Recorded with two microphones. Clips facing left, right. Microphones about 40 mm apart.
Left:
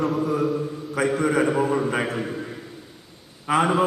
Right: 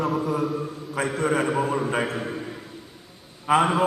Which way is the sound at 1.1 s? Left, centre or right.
Right.